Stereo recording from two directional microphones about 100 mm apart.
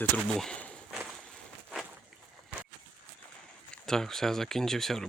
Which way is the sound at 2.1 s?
Centre (ahead or behind).